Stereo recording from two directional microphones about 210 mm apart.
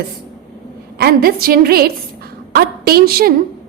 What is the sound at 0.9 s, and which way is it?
A woman's voice, 45° right (ahead or behind).